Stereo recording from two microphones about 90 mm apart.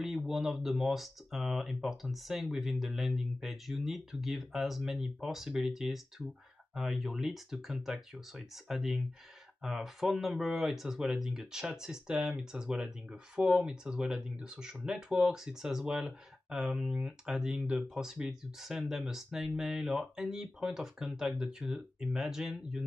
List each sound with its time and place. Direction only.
0.3 s speech: 5° right (ahead or behind)